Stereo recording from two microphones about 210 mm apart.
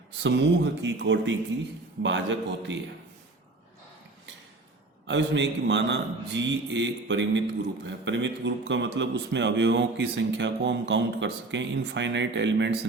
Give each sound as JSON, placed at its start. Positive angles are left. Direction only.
{"t": 0.2, "sound": "a man's voice", "side_deg": -55}
{"t": 5.0, "sound": "a man's voice", "side_deg": -60}